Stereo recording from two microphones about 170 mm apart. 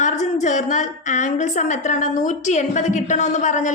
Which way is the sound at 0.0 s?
45° left (ahead or behind).